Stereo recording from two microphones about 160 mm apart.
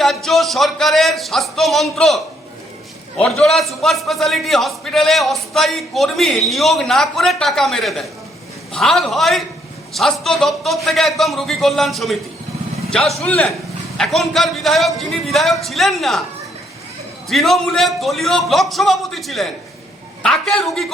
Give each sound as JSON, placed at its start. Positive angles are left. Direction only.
{"t": 0.0, "sound": "a man's voice", "side_deg": 0}
{"t": 17.2, "sound": "a man's voice", "side_deg": 0}